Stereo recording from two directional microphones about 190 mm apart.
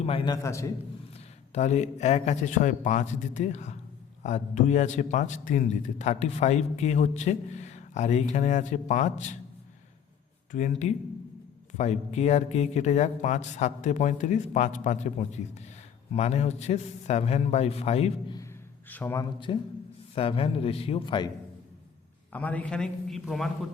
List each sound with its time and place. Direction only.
0.0 s a man's voice: 30° left (ahead or behind)
0.4 s a man's voice: 15° left (ahead or behind)
1.5 s a man's voice: 35° left (ahead or behind)
10.5 s a man's voice: 40° left (ahead or behind)
18.9 s a man's voice: 10° left (ahead or behind); by 21.2 s 25° left (ahead or behind)
22.3 s a man's voice: 10° left (ahead or behind)